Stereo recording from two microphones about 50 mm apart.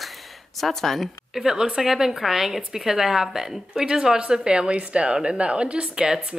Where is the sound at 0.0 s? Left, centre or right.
Centre.